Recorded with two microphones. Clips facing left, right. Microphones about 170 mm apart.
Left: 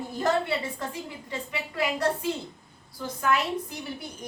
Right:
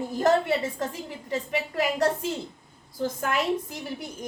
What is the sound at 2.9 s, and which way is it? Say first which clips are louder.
A woman's voice: even; 45° right (ahead or behind).